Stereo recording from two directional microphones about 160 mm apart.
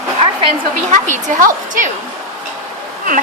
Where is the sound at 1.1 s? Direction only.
50° right (ahead or behind).